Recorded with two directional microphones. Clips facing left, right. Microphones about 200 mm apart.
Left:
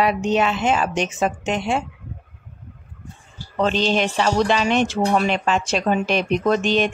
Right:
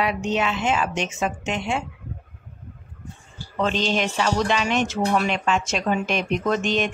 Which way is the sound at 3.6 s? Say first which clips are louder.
Left 3 dB; 35° left (ahead or behind).